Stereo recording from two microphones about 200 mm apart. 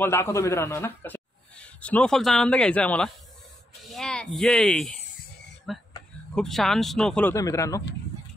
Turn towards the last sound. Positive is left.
turn(degrees=15)  # may be behind; listen again after turning